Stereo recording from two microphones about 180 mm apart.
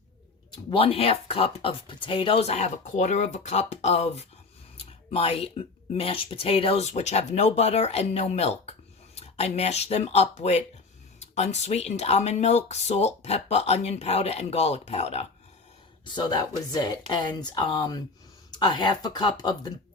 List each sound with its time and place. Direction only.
0.5 s speech: 30° left (ahead or behind)
16.0 s speech: 25° left (ahead or behind)